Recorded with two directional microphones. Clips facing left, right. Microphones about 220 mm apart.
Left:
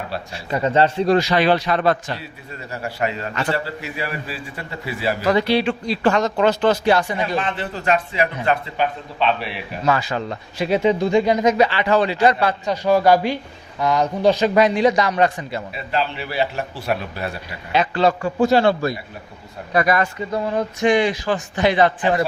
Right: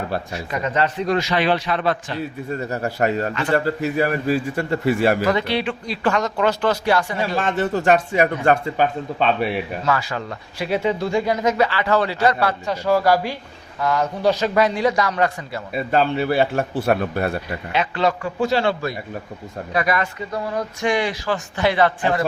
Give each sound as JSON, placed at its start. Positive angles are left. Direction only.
{"t": 0.3, "sound": "a man's voice", "side_deg": 30}
{"t": 2.5, "sound": "speech", "side_deg": -40}
{"t": 5.3, "sound": "speech", "side_deg": 35}
{"t": 7.3, "sound": "speech", "side_deg": -45}
{"t": 9.8, "sound": "speech", "side_deg": 20}
{"t": 15.7, "sound": "speech", "side_deg": -50}
{"t": 17.7, "sound": "a man's voice", "side_deg": 35}
{"t": 18.3, "sound": "a man's voice", "side_deg": 45}
{"t": 20.3, "sound": "speech", "side_deg": 25}